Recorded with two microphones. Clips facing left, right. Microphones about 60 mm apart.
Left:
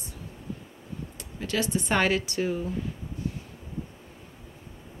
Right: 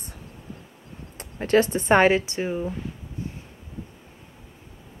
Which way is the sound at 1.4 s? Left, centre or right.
Right.